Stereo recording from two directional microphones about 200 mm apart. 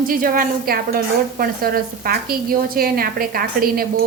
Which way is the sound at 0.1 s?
45° right (ahead or behind).